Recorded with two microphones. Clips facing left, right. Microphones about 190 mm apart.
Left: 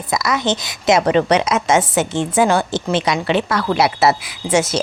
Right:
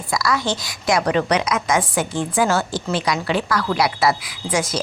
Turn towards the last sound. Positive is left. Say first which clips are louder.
# left 5 dB
turn(degrees=25)  # may be behind; listen again after turning